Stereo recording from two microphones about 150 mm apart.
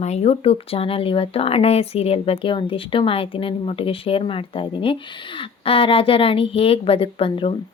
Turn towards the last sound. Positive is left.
turn(degrees=40)  # may be behind; listen again after turning